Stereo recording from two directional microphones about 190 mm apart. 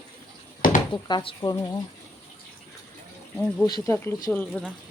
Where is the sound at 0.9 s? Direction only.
25° left (ahead or behind).